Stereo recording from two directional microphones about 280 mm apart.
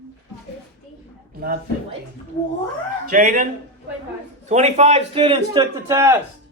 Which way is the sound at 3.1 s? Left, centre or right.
Right.